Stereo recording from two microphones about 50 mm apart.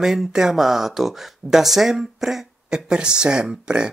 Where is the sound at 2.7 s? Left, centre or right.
Centre.